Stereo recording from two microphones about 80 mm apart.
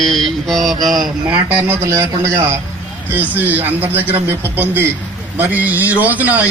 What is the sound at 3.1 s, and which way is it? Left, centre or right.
A man's voice, right.